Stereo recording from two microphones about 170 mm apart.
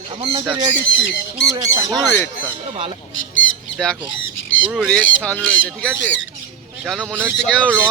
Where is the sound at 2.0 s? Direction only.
10° left (ahead or behind).